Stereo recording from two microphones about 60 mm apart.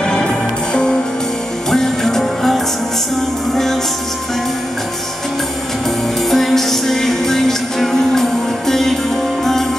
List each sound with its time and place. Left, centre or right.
1.7 s music: centre
6.3 s music: centre